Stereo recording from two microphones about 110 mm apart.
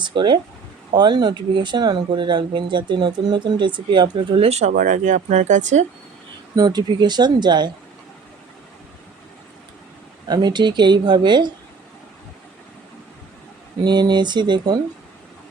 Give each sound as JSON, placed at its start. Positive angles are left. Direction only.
{"t": 0.0, "sound": "speech", "side_deg": -45}
{"t": 4.4, "sound": "speech", "side_deg": -75}
{"t": 6.6, "sound": "speech", "side_deg": -40}
{"t": 10.2, "sound": "speech", "side_deg": -40}
{"t": 13.8, "sound": "speech", "side_deg": -40}